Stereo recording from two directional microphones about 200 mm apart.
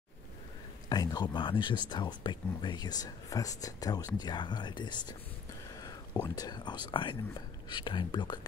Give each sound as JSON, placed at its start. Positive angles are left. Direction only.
{"t": 0.8, "sound": "speech", "side_deg": 20}
{"t": 6.2, "sound": "speech", "side_deg": 20}